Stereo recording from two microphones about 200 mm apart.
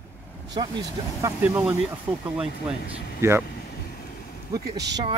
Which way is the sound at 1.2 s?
5° right (ahead or behind).